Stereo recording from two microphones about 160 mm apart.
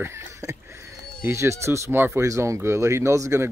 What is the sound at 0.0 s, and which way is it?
Speech, 15° right (ahead or behind).